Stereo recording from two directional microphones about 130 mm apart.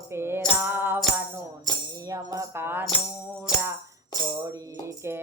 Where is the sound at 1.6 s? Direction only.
25° right (ahead or behind).